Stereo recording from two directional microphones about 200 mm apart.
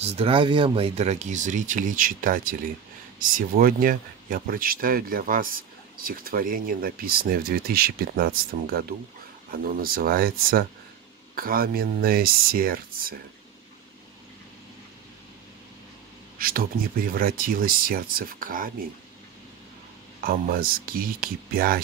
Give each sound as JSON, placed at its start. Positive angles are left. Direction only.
{"t": 0.0, "sound": "speech", "side_deg": -30}
{"t": 16.3, "sound": "speech", "side_deg": -45}
{"t": 20.2, "sound": "speech", "side_deg": -45}